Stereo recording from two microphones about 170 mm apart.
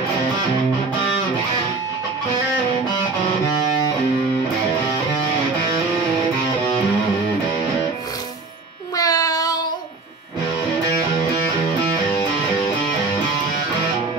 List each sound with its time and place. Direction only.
8.9 s music: 20° left (ahead or behind)